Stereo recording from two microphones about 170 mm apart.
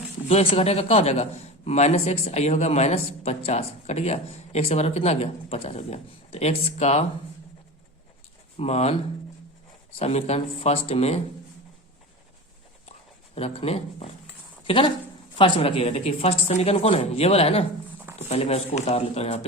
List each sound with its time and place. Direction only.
0.3 s a man's voice: 35° left (ahead or behind)
8.5 s a man's voice: 40° left (ahead or behind)
10.0 s a man's voice: 40° left (ahead or behind)
13.3 s a man's voice: 35° left (ahead or behind)
14.6 s a sound: 30° left (ahead or behind)
15.4 s a man's voice: 30° left (ahead or behind)